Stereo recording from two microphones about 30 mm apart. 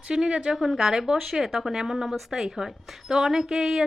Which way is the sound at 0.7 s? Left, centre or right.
Centre.